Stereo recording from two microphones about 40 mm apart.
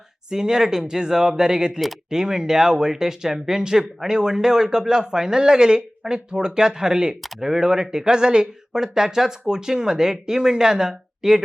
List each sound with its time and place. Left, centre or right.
0.3 s speech: centre